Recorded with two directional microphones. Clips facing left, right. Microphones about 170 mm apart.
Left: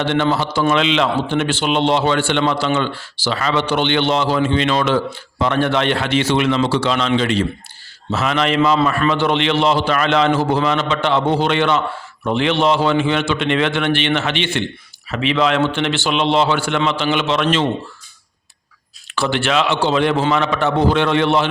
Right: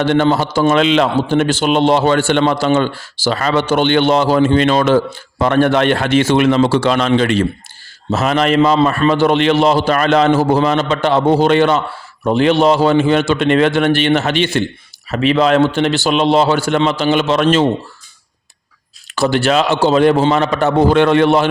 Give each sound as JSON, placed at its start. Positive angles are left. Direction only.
{"t": 0.0, "sound": "a man's voice", "side_deg": -45}
{"t": 8.1, "sound": "a man's voice", "side_deg": -40}
{"t": 19.1, "sound": "a man's voice", "side_deg": -40}